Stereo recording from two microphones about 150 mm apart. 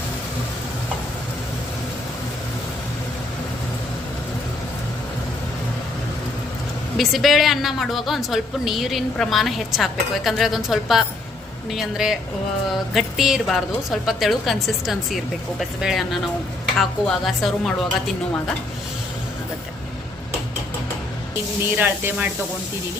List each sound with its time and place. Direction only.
6.9 s a woman's voice: centre (ahead or behind)
21.6 s speech: 15° right (ahead or behind)